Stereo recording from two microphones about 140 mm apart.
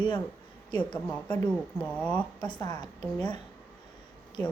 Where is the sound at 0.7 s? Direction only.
35° left (ahead or behind).